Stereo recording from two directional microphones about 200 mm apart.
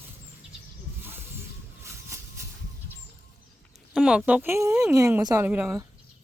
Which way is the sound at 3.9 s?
5° right (ahead or behind).